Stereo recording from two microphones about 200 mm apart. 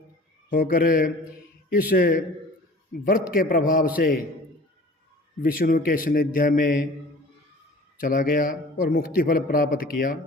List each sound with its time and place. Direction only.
0.5 s a man's voice: 45° left (ahead or behind)
5.4 s a man's voice: 45° left (ahead or behind)
8.0 s a man's voice: 45° left (ahead or behind)